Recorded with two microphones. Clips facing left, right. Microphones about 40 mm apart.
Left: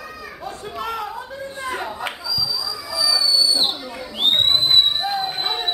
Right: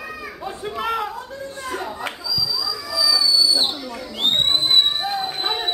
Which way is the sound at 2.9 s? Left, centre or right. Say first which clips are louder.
Right 1 dB; centre.